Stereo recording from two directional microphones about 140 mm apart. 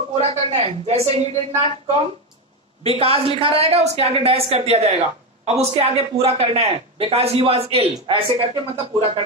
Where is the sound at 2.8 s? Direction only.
45° right (ahead or behind).